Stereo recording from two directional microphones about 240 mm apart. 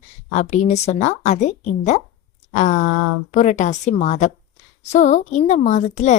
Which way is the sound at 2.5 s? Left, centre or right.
Left.